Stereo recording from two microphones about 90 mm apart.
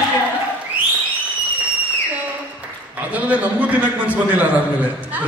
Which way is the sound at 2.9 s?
15° right (ahead or behind).